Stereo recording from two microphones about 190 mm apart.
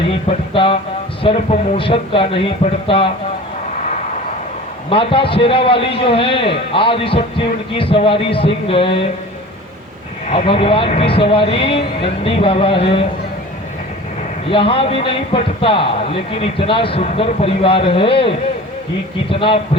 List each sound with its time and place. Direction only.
0.1 s a man's voice: 30° left (ahead or behind)
4.9 s a man's voice: 30° left (ahead or behind)
10.2 s a man's voice: 30° left (ahead or behind)
14.5 s a man's voice: 30° left (ahead or behind)